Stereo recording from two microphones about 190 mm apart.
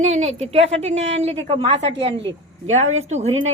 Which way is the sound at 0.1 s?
35° right (ahead or behind).